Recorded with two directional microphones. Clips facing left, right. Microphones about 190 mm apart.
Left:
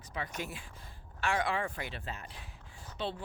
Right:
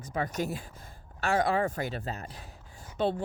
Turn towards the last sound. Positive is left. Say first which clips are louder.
# right 9 dB
turn(degrees=-50)  # may be behind; listen again after turning